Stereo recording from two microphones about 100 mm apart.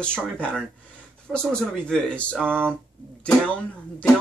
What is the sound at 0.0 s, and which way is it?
Speech, 10° left (ahead or behind).